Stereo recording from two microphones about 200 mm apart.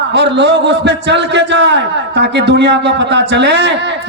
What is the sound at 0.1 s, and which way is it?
A man's voice, 60° right (ahead or behind).